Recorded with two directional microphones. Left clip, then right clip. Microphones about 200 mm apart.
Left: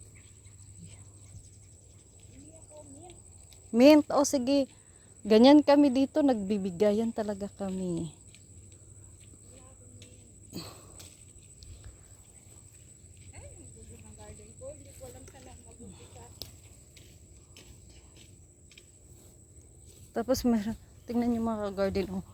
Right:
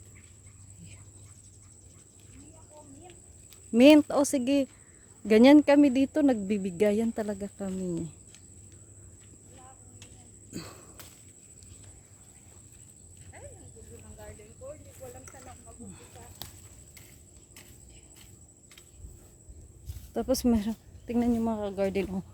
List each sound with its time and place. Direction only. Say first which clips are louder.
3.7 s a woman's voice: right 1 dB; 20° right (ahead or behind)
10.5 s a sound: right 1 dB; 15° right (ahead or behind)
15.2 s snake: right 3 dB; 30° right (ahead or behind)
20.1 s a woman's voice: right 1 dB; 10° right (ahead or behind)